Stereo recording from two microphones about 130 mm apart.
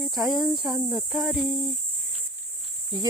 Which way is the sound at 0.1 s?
Centre (ahead or behind).